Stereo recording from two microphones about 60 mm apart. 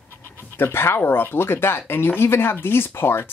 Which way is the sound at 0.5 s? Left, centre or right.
Left.